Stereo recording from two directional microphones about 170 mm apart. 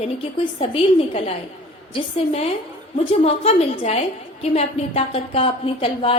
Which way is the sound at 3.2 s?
35° left (ahead or behind).